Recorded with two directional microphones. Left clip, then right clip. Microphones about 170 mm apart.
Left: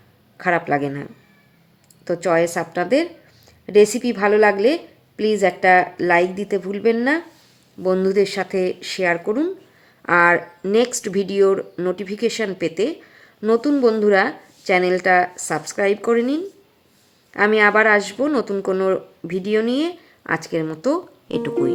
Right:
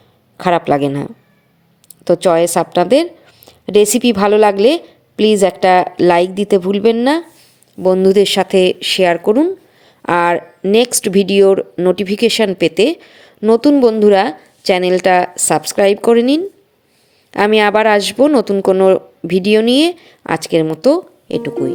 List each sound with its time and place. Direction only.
0.3 s a woman's voice: 35° right (ahead or behind)
9.8 s a sound: 35° right (ahead or behind)
10.7 s a woman's voice: 35° right (ahead or behind)
21.2 s speech: 20° right (ahead or behind)